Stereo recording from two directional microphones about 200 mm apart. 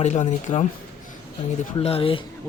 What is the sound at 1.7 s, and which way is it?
Speech, 30° left (ahead or behind).